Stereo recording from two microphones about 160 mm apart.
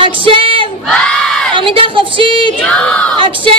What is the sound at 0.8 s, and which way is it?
Crowd, 5° left (ahead or behind).